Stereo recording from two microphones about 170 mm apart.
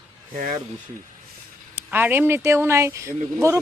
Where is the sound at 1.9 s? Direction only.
10° right (ahead or behind).